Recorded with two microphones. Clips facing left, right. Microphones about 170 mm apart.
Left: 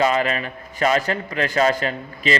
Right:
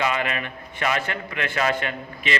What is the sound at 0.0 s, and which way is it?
A man's voice, 35° left (ahead or behind).